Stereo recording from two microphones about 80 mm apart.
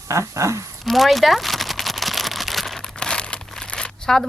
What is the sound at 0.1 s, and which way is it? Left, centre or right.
Speech, right.